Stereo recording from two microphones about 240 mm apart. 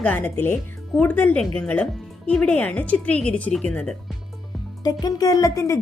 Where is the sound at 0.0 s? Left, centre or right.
Centre.